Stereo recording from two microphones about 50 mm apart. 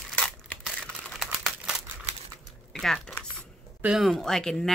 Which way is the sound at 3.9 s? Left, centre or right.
Centre.